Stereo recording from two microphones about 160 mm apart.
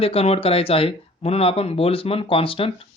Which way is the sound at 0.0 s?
35° left (ahead or behind).